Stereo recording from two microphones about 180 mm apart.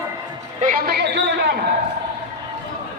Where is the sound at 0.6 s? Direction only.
55° right (ahead or behind); by 1.6 s 70° right (ahead or behind).